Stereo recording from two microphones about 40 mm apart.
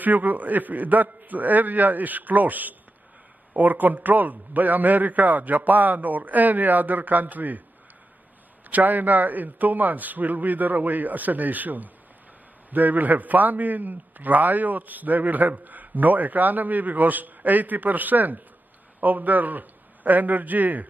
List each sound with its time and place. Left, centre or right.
0.0 s a man's voice: right
8.6 s a man's voice: right